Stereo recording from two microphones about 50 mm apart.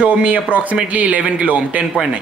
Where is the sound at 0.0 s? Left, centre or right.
Right.